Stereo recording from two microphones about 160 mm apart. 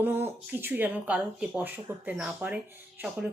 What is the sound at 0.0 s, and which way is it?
Speech, 15° right (ahead or behind).